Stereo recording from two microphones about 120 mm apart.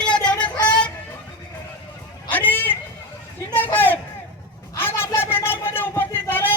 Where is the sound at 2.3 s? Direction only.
15° left (ahead or behind).